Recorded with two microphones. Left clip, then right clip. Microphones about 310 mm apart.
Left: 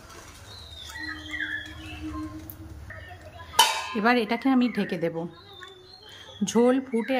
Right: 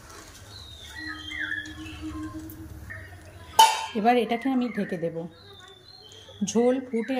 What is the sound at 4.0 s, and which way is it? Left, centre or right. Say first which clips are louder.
Speech: right 1 dB; centre.